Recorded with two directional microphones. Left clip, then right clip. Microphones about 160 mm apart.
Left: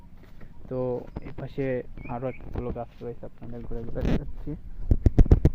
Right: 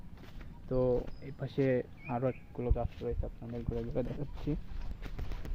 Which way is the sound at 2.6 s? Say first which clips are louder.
Left 2 dB; 35° left (ahead or behind).